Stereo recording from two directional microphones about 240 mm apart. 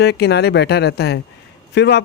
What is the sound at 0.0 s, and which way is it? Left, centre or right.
Speech, left.